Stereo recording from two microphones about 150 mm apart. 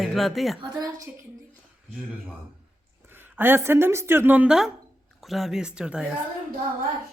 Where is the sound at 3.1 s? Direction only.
15° right (ahead or behind).